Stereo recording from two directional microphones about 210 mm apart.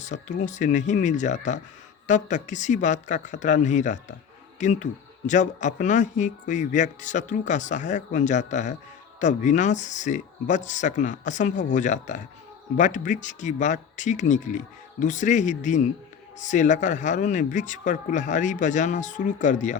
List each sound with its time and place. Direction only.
0.0 s speech: 35° left (ahead or behind)